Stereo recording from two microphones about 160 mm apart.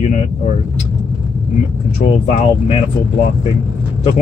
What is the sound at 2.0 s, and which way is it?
Speech, 45° left (ahead or behind).